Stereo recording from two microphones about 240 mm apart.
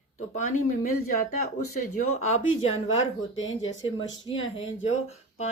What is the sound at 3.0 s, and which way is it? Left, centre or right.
Speech, left.